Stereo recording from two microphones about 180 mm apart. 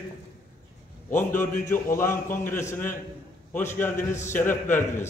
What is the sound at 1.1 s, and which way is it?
A man's voice, 10° left (ahead or behind).